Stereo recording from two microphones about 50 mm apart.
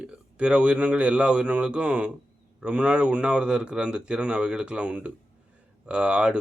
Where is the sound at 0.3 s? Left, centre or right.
Right.